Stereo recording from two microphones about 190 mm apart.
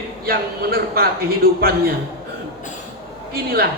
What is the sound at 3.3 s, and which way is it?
Speech, 55° right (ahead or behind).